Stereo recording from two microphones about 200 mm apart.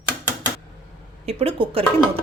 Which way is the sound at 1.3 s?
30° right (ahead or behind).